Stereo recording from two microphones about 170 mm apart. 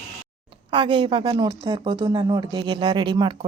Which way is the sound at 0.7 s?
30° right (ahead or behind).